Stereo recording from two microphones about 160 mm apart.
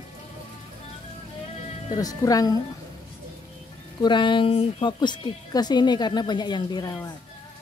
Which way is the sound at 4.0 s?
30° left (ahead or behind).